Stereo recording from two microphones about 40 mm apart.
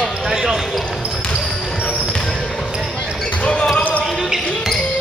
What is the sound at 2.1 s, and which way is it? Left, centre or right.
Basketball bounce, centre.